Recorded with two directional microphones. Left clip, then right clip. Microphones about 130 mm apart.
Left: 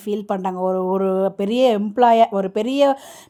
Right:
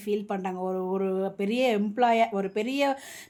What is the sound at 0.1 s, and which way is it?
Speech, 40° left (ahead or behind).